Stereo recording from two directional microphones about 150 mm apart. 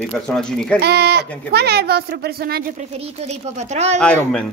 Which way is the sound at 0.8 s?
90° right.